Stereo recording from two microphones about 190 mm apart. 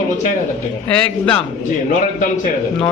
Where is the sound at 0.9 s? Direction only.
5° left (ahead or behind).